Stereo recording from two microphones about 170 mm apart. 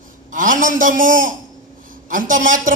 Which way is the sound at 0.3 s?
50° right (ahead or behind).